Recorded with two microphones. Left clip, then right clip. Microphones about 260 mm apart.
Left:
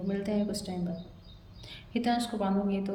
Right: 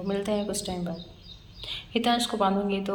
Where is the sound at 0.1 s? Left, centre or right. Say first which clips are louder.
Right 5 dB; centre.